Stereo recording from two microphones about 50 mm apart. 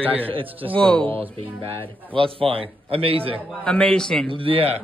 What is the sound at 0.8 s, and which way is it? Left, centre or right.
Speech, centre.